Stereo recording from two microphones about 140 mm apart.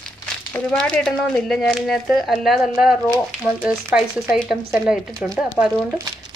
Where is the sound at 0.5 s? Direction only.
10° left (ahead or behind).